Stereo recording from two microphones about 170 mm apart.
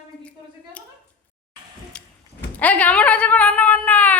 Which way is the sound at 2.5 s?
10° left (ahead or behind).